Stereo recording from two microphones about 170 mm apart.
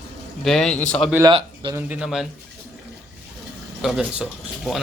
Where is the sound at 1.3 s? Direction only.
30° right (ahead or behind).